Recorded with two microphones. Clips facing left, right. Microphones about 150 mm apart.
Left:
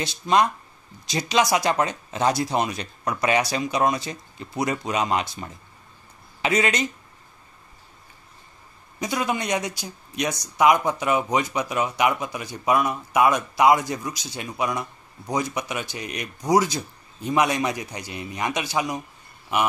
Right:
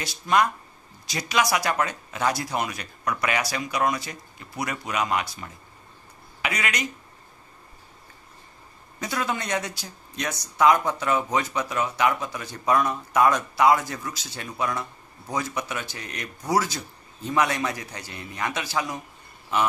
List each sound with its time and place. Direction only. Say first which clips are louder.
0.0 s speech: left 2 dB; 20° left (ahead or behind)
9.0 s speech: left 3 dB; 15° left (ahead or behind)